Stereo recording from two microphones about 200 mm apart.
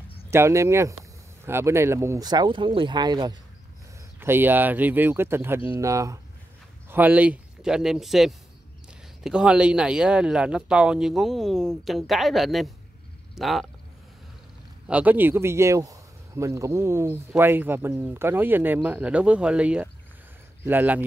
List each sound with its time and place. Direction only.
0.3 s speech: 15° right (ahead or behind)
4.2 s speech: 10° right (ahead or behind)
14.9 s speech: 10° right (ahead or behind)